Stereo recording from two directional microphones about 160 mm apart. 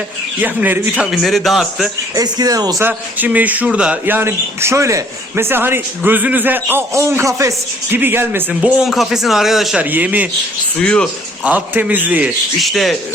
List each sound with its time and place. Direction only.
0.4 s a man's voice: 10° right (ahead or behind)
2.1 s speech: 25° right (ahead or behind)
2.8 s speech: 10° right (ahead or behind)
10.8 s a man's voice: 5° left (ahead or behind)
11.4 s speech: 10° right (ahead or behind)